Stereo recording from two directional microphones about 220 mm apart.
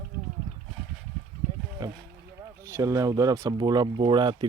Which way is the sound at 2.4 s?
15° right (ahead or behind).